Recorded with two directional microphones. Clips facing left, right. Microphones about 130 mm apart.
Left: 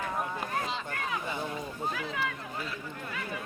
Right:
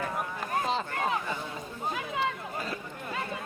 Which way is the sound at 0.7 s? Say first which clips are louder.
Right 5 dB; 40° right (ahead or behind).